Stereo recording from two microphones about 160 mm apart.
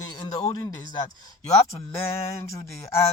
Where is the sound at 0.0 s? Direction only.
25° left (ahead or behind).